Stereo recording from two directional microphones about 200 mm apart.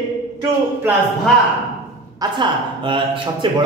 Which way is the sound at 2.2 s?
25° right (ahead or behind).